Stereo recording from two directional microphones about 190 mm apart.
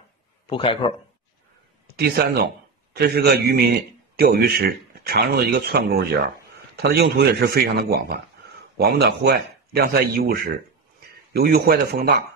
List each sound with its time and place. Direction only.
0.5 s speech: 25° left (ahead or behind)
2.0 s a man's voice: 55° right (ahead or behind)